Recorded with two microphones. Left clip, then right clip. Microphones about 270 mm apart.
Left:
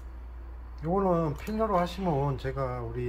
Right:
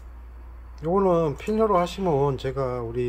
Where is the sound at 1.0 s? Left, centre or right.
Right.